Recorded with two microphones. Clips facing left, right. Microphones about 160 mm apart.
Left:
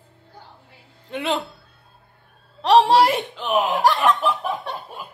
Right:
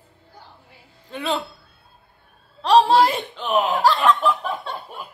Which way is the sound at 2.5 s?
20° left (ahead or behind).